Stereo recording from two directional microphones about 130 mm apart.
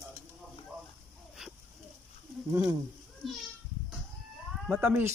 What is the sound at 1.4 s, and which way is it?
Dog, 5° right (ahead or behind).